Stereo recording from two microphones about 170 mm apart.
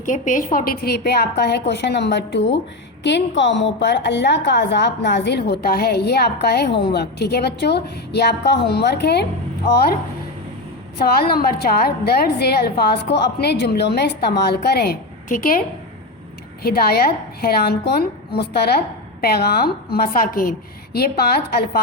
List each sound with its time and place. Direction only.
0.0 s a woman's voice: 50° left (ahead or behind); by 9.2 s 75° left (ahead or behind)
10.9 s a woman's voice: 65° left (ahead or behind)
16.6 s a woman's voice: 65° left (ahead or behind)